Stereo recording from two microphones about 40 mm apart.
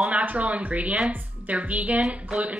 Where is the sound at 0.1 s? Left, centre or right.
Right.